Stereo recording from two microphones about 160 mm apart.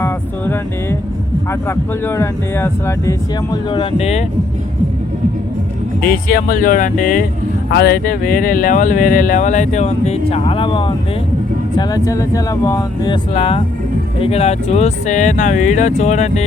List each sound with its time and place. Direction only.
0.0 s music: 15° left (ahead or behind)
1.5 s speech: 15° left (ahead or behind)
3.7 s speech: 35° left (ahead or behind)
6.0 s speech: 70° left (ahead or behind)
7.7 s speech: 85° left; by 13.1 s 20° left (ahead or behind)
13.3 s speech: 35° left (ahead or behind)